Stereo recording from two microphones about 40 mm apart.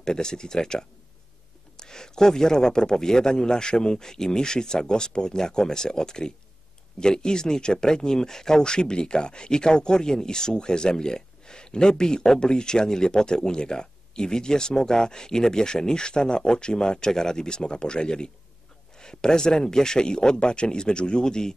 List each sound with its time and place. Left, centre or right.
0.0 s a man's voice: centre